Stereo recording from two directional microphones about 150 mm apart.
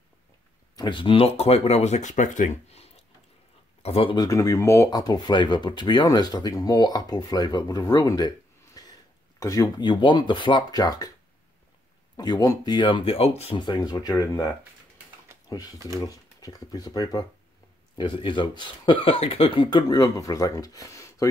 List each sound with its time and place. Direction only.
0.7 s speech: 35° left (ahead or behind); by 2.9 s 50° left (ahead or behind)
3.8 s speech: 40° left (ahead or behind)
4.2 s speech: 25° left (ahead or behind)
8.8 s a sound: 25° left (ahead or behind)
9.4 s speech: 20° left (ahead or behind)
12.2 s speech: 25° left (ahead or behind)
16.0 s speech: 25° left (ahead or behind)